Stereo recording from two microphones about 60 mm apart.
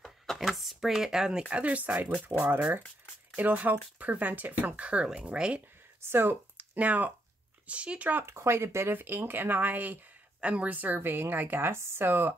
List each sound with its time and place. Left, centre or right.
0.0 s a sound: centre
1.5 s speech: right
3.3 s speech: right
6.0 s speech: right
8.3 s speech: right